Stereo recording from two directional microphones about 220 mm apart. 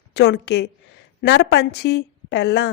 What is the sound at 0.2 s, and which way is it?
A woman's voice, 50° left (ahead or behind).